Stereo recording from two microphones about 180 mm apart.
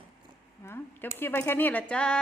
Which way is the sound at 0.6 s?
15° left (ahead or behind).